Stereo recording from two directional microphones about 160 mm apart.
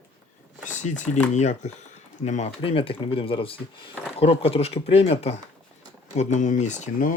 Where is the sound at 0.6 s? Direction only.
50° left (ahead or behind).